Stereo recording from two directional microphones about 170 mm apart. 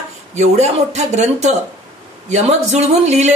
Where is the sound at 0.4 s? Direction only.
40° right (ahead or behind).